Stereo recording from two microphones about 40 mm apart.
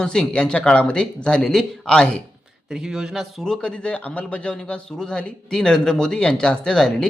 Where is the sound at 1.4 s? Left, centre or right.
Centre.